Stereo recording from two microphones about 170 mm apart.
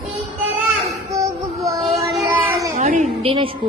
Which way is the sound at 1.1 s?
20° right (ahead or behind).